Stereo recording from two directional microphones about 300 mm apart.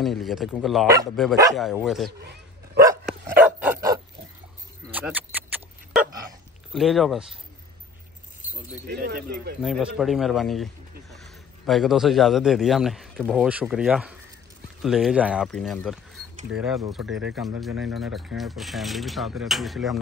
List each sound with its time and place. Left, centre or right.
0.0 s speech: centre
2.8 s dog: centre
6.7 s speech: centre
8.8 s speech: right
9.6 s a man's voice: centre